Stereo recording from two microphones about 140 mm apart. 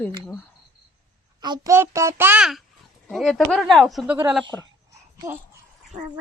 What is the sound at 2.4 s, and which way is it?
Speech, centre (ahead or behind).